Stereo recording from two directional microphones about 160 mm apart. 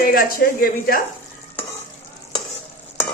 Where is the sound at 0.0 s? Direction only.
65° left (ahead or behind).